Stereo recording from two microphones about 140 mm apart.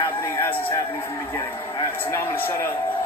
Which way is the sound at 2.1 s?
15° left (ahead or behind).